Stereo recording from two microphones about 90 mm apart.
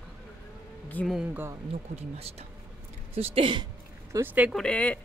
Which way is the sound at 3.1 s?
90° right.